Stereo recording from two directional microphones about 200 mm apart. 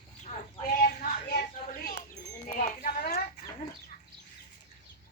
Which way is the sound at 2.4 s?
40° left (ahead or behind).